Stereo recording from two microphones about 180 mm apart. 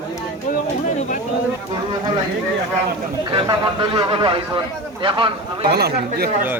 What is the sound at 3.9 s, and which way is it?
A man's voice, 30° right (ahead or behind).